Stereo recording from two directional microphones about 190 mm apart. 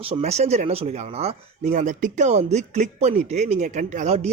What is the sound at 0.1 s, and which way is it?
Speech, 35° right (ahead or behind).